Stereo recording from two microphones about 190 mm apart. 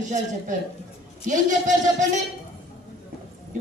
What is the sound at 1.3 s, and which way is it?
Speech, 40° right (ahead or behind).